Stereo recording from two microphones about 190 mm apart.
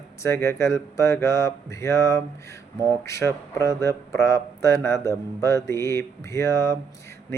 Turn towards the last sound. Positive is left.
turn(degrees=15)  # may be behind; listen again after turning